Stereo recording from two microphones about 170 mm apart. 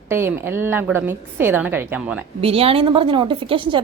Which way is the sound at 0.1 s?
15° right (ahead or behind).